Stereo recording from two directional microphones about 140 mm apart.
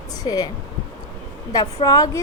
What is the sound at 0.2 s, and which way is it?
Speech, 30° left (ahead or behind).